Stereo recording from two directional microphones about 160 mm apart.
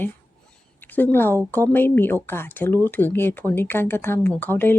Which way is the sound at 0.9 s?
10° left (ahead or behind).